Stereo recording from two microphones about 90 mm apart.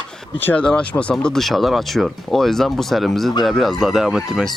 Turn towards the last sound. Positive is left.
turn(degrees=-5)  # may be behind; listen again after turning